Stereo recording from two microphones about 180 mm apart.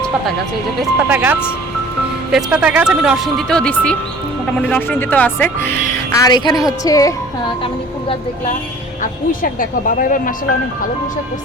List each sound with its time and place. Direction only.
0.8 s a woman's voice: 10° right (ahead or behind); by 7.1 s 20° left (ahead or behind)
9.4 s speech: 50° left (ahead or behind)